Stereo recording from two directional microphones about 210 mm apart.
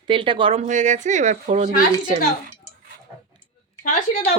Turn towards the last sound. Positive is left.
turn(degrees=35)  # may be behind; listen again after turning